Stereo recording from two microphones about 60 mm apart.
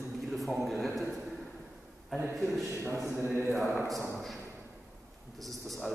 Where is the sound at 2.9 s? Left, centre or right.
Right.